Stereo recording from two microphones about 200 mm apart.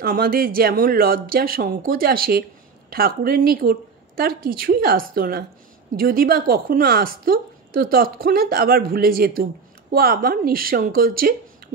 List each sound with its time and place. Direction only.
0.0 s a woman's voice: 45° right (ahead or behind)